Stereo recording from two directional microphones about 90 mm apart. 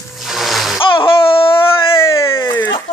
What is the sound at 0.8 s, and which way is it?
Speech, 75° left (ahead or behind).